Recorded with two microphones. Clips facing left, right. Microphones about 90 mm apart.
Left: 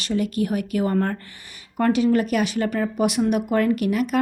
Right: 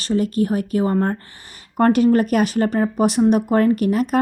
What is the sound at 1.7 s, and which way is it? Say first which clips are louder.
A woman's voice: right 4 dB; 45° right (ahead or behind).